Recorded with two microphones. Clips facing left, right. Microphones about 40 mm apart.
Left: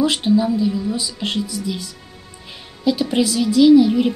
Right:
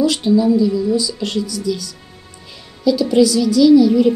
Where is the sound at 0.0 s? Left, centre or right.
Left.